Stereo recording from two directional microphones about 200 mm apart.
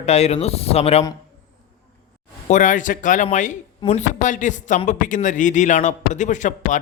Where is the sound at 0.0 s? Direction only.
35° left (ahead or behind).